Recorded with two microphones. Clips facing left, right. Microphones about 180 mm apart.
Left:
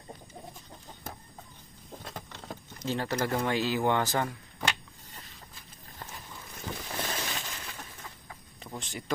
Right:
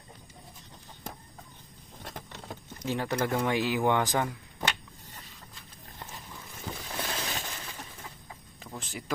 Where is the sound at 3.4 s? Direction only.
15° right (ahead or behind).